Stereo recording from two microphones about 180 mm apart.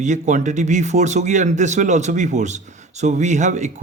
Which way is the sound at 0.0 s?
40° right (ahead or behind).